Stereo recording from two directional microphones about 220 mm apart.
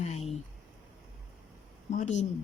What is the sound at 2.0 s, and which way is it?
Speech, 30° left (ahead or behind).